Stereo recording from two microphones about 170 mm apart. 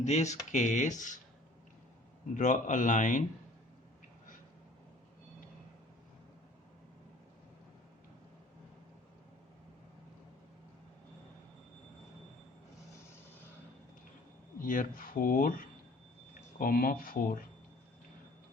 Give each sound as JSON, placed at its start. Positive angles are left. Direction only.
{"t": 0.0, "sound": "speech", "side_deg": 45}
{"t": 2.3, "sound": "speech", "side_deg": 45}
{"t": 14.6, "sound": "speech", "side_deg": 55}